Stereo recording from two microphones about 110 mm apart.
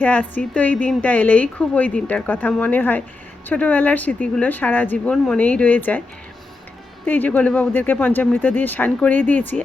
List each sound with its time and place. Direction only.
0.0 s a woman's voice: 15° left (ahead or behind)
5.1 s speech: 5° left (ahead or behind)
5.4 s a woman's voice: 15° left (ahead or behind)
7.0 s a woman's voice: 15° left (ahead or behind)